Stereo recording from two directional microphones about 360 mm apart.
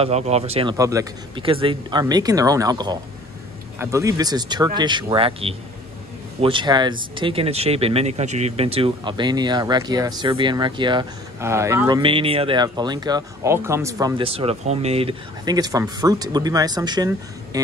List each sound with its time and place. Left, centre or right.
0.0 s speech: centre